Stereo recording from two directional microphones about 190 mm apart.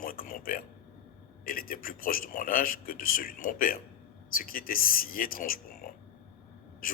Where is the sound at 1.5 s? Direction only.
50° left (ahead or behind).